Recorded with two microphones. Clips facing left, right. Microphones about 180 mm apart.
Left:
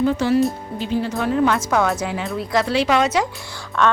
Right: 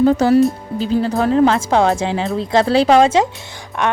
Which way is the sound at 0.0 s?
40° right (ahead or behind).